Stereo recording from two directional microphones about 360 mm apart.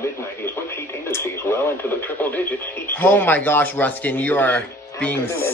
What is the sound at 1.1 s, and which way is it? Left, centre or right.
Radio, centre.